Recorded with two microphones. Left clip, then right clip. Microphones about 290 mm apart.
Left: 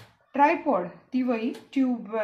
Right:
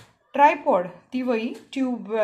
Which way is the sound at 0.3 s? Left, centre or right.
Right.